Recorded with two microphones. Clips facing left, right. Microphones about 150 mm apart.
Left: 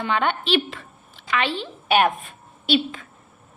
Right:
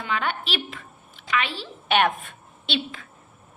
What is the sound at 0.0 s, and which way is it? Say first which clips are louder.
A woman's voice: left 5 dB; 25° left (ahead or behind).